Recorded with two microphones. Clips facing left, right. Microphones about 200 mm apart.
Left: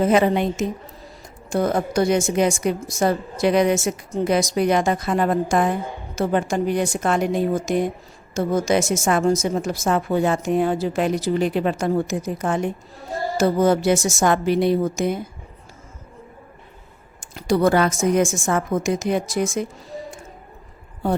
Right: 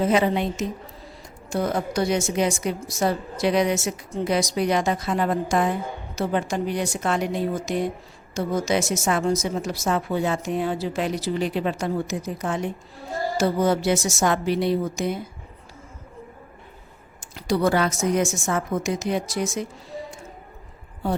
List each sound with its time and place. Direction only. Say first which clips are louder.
0.0 s a woman's voice: left 3 dB; 50° left (ahead or behind)
17.2 s a woman's voice: left 4 dB; 50° left (ahead or behind)